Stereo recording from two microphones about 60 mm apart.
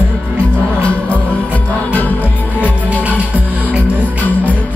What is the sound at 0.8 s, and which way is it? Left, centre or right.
Music, left.